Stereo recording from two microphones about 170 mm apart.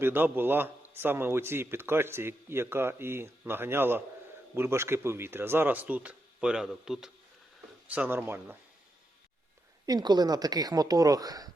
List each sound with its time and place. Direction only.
0.0 s a man's voice: 10° right (ahead or behind)
9.8 s a woman's voice: 25° right (ahead or behind)